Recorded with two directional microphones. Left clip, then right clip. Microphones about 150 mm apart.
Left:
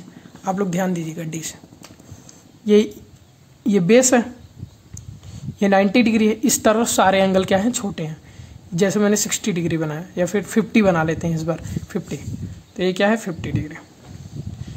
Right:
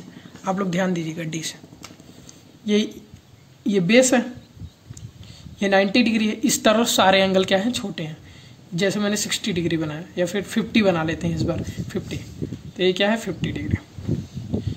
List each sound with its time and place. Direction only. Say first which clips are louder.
0.4 s speech: left 1 dB; 25° left (ahead or behind)
5.6 s speech: left 2 dB; 35° left (ahead or behind)